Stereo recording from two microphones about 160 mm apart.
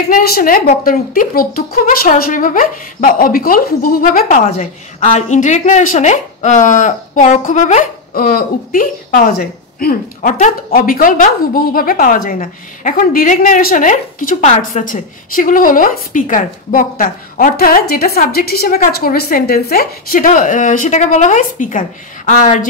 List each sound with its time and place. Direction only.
0.1 s speech: 70° left (ahead or behind); by 22.7 s 50° left (ahead or behind)